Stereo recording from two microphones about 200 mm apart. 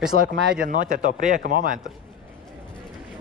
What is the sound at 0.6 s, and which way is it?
Speech, 40° right (ahead or behind).